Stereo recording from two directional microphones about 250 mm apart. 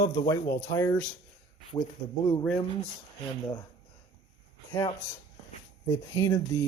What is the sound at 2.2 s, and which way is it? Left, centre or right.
Speech, centre.